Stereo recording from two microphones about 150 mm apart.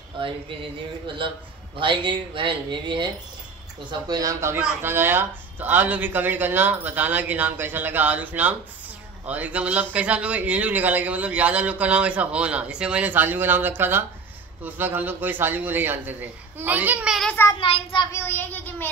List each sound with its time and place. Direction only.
1.0 s a man's voice: 35° right (ahead or behind); by 17.3 s 5° right (ahead or behind)
17.3 s a woman's voice: 15° left (ahead or behind)
17.6 s speech: 35° left (ahead or behind)
18.1 s a woman's voice: 15° left (ahead or behind)